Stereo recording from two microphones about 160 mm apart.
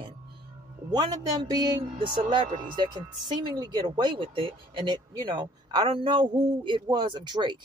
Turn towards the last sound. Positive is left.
turn(degrees=-30)  # may be behind; listen again after turning